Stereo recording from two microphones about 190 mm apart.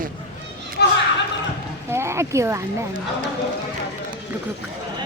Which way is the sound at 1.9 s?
15° right (ahead or behind).